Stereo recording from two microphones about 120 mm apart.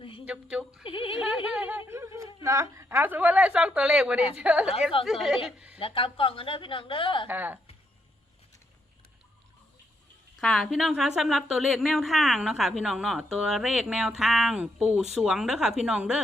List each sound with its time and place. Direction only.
0.3 s a woman's voice: 10° right (ahead or behind)
0.9 s a sound: 50° left (ahead or behind)
1.5 s a sound: 15° right (ahead or behind)
1.9 s a woman's voice: 25° right (ahead or behind); by 5.8 s 10° right (ahead or behind)
5.8 s a woman's voice: 50° left (ahead or behind)
7.3 s a woman's voice: 15° right (ahead or behind)
10.4 s a woman's voice: 5° left (ahead or behind)